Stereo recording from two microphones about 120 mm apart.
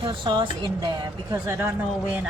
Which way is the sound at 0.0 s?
40° right (ahead or behind).